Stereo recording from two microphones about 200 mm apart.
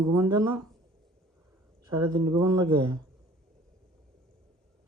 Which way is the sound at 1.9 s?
20° right (ahead or behind).